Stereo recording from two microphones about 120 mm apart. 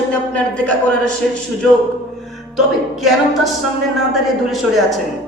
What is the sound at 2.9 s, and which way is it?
Speech, centre (ahead or behind).